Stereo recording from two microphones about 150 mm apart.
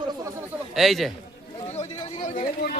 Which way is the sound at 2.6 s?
90° left.